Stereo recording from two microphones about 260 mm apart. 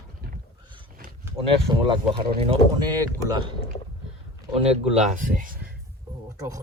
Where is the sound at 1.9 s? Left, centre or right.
Right.